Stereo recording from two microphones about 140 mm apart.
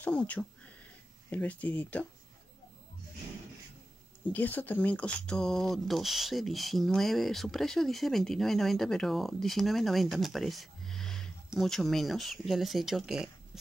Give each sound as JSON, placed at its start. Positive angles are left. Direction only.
{"t": 0.0, "sound": "speech", "side_deg": 10}
{"t": 4.2, "sound": "speech", "side_deg": 10}